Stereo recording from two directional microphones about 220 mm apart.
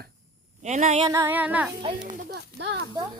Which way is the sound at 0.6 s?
35° right (ahead or behind).